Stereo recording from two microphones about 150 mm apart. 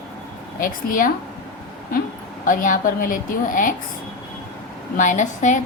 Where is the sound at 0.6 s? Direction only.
65° left (ahead or behind).